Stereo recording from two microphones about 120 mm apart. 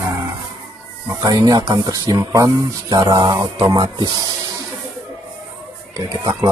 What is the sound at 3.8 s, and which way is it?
Speech, 35° right (ahead or behind).